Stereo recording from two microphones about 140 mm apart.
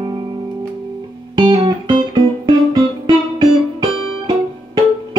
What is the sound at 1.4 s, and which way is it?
Music, 35° right (ahead or behind).